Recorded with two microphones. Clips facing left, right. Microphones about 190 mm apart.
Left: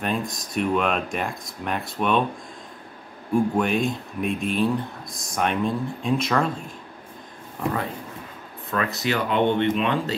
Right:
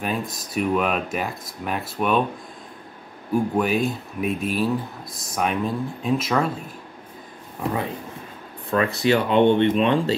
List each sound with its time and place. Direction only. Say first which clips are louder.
0.0 s speech: even; 5° right (ahead or behind)
3.3 s speech: even; 5° right (ahead or behind)
8.6 s speech: right 5 dB; 30° right (ahead or behind)